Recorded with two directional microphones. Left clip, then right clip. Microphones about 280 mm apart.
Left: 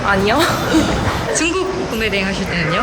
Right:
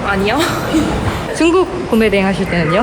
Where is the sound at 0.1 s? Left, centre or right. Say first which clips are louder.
Left 1 dB; centre.